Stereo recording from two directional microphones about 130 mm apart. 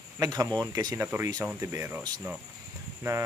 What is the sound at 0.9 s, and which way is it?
Speech, 20° right (ahead or behind).